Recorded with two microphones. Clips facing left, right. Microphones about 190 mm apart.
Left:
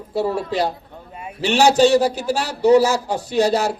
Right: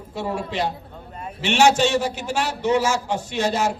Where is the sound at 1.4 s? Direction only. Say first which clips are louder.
Left 4 dB; 35° left (ahead or behind).